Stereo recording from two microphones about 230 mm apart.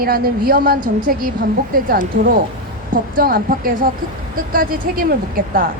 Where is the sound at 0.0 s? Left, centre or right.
Right.